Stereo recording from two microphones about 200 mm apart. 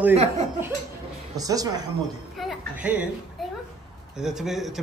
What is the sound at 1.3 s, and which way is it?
Speech, 20° right (ahead or behind).